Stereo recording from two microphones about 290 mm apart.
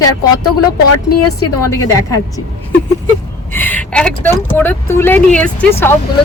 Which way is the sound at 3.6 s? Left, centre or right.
Centre.